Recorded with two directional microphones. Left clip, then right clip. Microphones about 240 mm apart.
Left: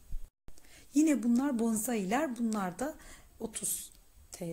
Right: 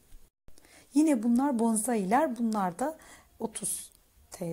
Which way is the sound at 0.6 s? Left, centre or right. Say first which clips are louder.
Right 2 dB; centre.